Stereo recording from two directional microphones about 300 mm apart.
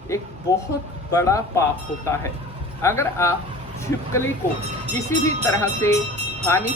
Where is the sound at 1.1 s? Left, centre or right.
Centre.